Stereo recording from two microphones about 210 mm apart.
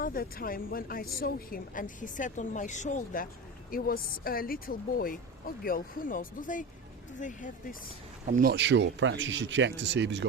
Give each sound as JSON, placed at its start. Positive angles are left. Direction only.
{"t": 0.0, "sound": "a woman's voice", "side_deg": 45}
{"t": 8.3, "sound": "speech", "side_deg": -45}